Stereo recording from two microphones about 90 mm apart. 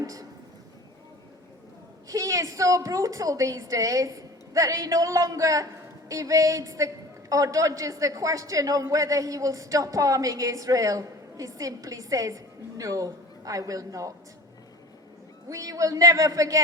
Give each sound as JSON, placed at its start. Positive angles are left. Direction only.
{"t": 0.0, "sound": "speech", "side_deg": -40}
{"t": 2.0, "sound": "a woman's voice", "side_deg": -40}
{"t": 15.4, "sound": "a woman's voice", "side_deg": -40}